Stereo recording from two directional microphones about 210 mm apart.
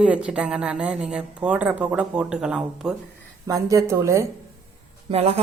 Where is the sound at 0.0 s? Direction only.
5° right (ahead or behind).